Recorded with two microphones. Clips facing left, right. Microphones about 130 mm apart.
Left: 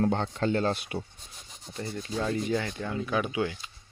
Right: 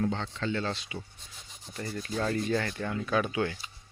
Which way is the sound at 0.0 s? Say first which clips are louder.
Left 4 dB; 50° left (ahead or behind).